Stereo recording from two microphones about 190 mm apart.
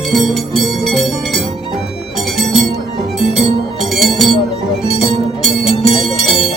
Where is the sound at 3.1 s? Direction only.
Centre (ahead or behind).